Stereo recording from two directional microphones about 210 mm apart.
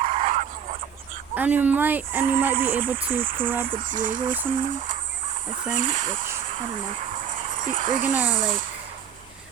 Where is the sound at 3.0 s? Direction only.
25° right (ahead or behind).